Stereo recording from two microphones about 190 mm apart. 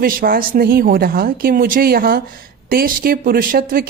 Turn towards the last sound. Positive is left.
turn(degrees=-50)  # may be behind; listen again after turning